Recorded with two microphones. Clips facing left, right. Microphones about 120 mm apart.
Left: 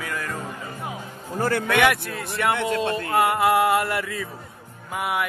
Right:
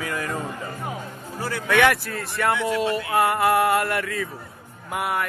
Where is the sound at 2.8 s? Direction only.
25° left (ahead or behind).